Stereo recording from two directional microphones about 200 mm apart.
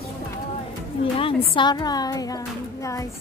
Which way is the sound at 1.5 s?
20° left (ahead or behind).